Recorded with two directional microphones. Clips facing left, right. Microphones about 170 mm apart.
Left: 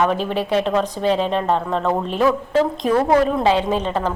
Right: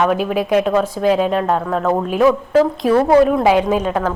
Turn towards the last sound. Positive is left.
turn(degrees=-10)  # may be behind; listen again after turning